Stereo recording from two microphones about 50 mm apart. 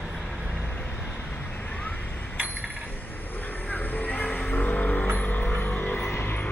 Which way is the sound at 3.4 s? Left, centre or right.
Left.